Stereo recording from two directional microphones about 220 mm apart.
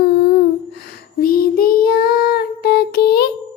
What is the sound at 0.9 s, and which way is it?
Child singing, 40° left (ahead or behind).